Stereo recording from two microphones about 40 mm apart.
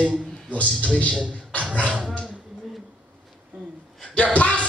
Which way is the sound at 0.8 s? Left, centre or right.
Left.